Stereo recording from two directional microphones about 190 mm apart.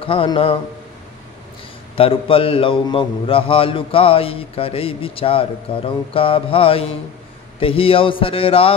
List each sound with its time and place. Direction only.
0.0 s a man's voice: 30° left (ahead or behind)
2.0 s a man's voice: 30° left (ahead or behind)